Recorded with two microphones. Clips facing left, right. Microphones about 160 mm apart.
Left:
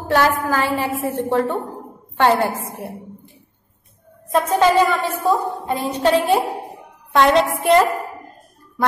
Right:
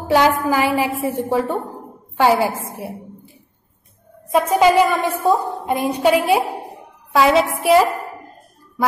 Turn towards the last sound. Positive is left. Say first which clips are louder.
# right 1 dB
turn(degrees=-5)  # may be behind; listen again after turning